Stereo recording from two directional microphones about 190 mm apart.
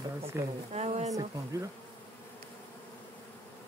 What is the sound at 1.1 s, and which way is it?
Speech, 20° right (ahead or behind).